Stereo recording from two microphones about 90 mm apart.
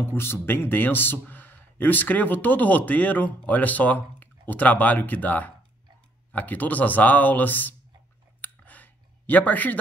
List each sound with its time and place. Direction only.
0.0 s speech: 25° left (ahead or behind)
8.4 s clicking: 20° left (ahead or behind)